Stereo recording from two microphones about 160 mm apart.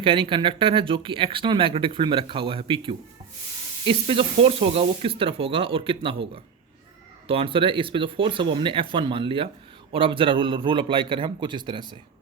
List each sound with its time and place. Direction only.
0.0 s speech: 30° right (ahead or behind)